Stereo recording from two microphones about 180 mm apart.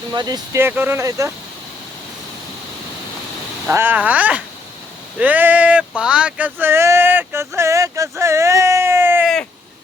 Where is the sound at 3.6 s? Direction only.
10° right (ahead or behind).